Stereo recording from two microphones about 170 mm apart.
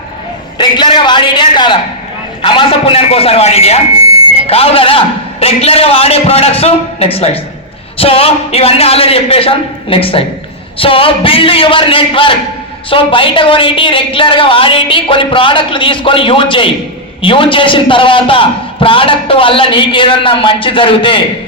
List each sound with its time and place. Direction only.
0.6 s a man's voice: 25° left (ahead or behind)